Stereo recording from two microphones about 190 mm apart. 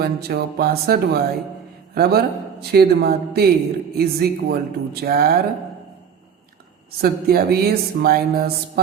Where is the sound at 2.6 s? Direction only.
55° right (ahead or behind).